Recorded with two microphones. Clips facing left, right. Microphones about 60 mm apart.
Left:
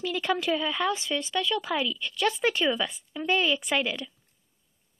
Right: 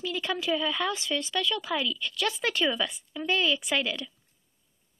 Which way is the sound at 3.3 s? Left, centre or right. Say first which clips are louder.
Left 1 dB; left.